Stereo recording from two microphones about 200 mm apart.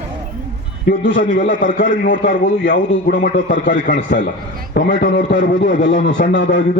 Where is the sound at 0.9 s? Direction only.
60° left (ahead or behind).